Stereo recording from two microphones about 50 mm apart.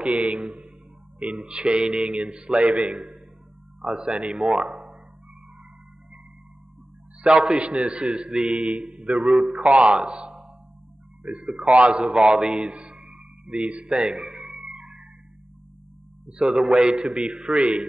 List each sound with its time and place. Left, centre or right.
0.0 s a man's voice: right
0.4 s a man's voice: centre
7.2 s a man's voice: centre
9.8 s a man's voice: centre
14.8 s music: centre
16.3 s a man's voice: right
16.5 s a man's voice: centre